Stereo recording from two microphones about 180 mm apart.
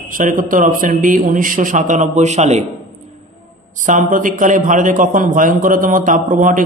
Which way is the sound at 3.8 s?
45° right (ahead or behind).